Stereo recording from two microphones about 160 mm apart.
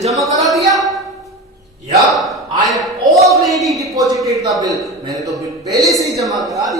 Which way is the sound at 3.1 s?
20° right (ahead or behind).